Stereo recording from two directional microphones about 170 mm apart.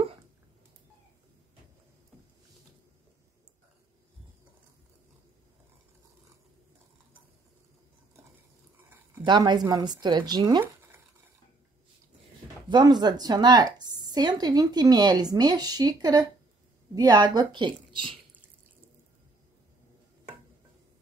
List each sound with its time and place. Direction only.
9.2 s a woman's voice: 25° right (ahead or behind)
12.6 s a woman's voice: 25° right (ahead or behind)